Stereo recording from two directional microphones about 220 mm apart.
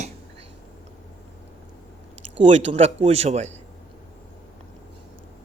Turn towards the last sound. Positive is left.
turn(degrees=-30)  # may be behind; listen again after turning